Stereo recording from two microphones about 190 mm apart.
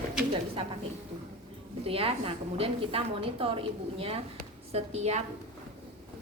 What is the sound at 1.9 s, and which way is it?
A woman's voice, 30° right (ahead or behind).